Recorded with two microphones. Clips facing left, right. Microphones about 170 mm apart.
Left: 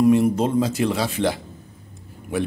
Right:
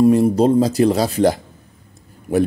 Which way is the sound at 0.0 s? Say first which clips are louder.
Right 4 dB; 35° right (ahead or behind).